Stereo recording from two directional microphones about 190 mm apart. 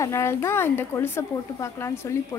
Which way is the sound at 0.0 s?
15° left (ahead or behind).